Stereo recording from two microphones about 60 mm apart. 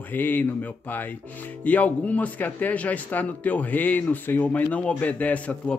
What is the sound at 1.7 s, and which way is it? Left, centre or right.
Speech, left.